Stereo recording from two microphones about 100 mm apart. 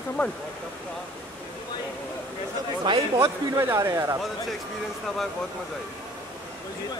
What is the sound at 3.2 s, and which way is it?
Speech, 30° right (ahead or behind).